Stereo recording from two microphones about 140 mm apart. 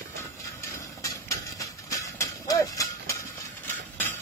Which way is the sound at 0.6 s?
20° left (ahead or behind).